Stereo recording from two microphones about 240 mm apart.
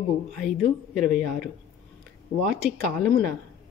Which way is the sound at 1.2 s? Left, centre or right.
Right.